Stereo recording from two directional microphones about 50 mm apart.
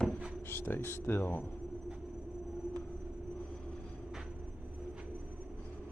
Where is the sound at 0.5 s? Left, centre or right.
Left.